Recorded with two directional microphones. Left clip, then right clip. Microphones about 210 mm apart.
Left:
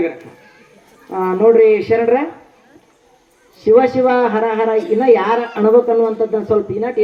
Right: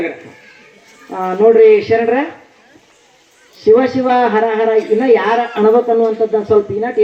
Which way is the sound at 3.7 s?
25° right (ahead or behind).